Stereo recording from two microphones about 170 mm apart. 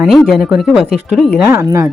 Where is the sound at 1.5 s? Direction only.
15° right (ahead or behind).